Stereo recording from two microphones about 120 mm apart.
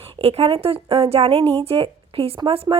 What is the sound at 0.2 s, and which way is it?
A woman's voice, 55° right (ahead or behind).